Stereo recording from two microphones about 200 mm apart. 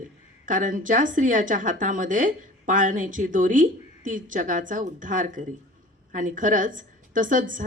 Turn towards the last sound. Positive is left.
turn(degrees=-40)  # may be behind; listen again after turning